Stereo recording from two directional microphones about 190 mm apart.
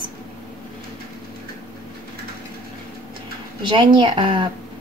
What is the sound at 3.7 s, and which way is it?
Speech, 25° right (ahead or behind).